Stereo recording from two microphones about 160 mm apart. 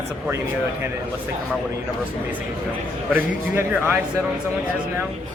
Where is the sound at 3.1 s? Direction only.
10° right (ahead or behind).